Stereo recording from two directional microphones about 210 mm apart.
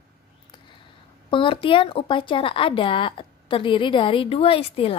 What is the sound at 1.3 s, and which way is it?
Speech, 25° left (ahead or behind).